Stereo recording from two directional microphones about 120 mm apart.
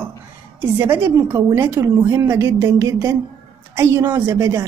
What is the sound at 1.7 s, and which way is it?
A woman's voice, 20° right (ahead or behind).